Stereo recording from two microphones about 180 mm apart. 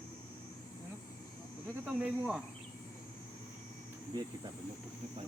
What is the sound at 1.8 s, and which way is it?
Speech, 5° right (ahead or behind).